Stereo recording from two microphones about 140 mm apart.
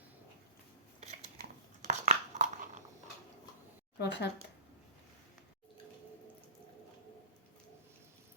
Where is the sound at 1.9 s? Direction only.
60° right (ahead or behind).